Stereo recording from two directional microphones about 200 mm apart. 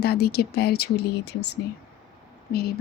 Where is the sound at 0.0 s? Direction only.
50° left (ahead or behind).